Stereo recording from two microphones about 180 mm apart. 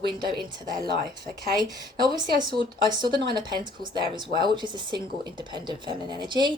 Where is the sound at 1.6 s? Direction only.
25° right (ahead or behind).